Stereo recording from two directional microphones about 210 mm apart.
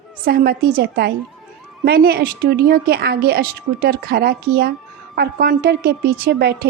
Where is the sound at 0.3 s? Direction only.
45° right (ahead or behind).